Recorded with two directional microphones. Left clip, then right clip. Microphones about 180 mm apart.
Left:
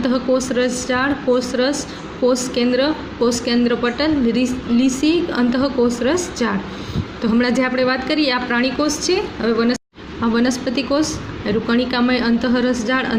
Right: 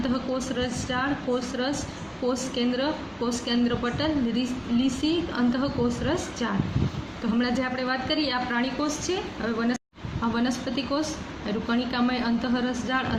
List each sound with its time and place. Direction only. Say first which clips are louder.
0.0 s a woman's voice: left 10 dB; 40° left (ahead or behind)